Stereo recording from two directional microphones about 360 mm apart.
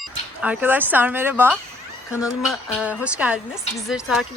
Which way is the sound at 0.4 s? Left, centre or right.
Centre.